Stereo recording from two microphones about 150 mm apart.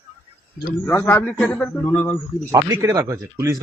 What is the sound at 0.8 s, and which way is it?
A man's voice, 15° left (ahead or behind).